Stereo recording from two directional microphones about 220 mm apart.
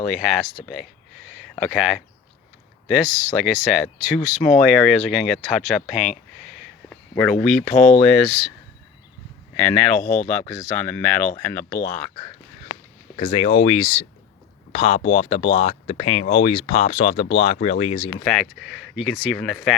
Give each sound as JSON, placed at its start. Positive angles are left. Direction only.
{"t": 0.0, "sound": "speech", "side_deg": 0}
{"t": 0.7, "sound": "a sound", "side_deg": 0}
{"t": 2.8, "sound": "speech", "side_deg": 0}
{"t": 9.6, "sound": "speech", "side_deg": 5}
{"t": 10.0, "sound": "speech", "side_deg": 35}
{"t": 10.5, "sound": "speech", "side_deg": 10}
{"t": 13.1, "sound": "speech", "side_deg": 25}
{"t": 18.2, "sound": "speech", "side_deg": 0}